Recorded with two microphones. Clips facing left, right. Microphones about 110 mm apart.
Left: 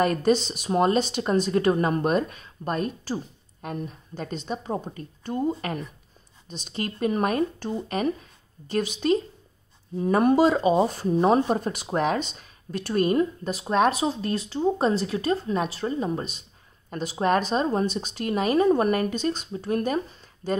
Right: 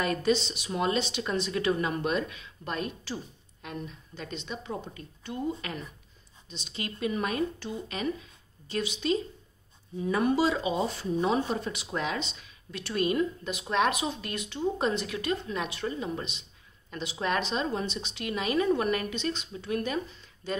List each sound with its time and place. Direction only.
0.0 s speech: 45° left (ahead or behind)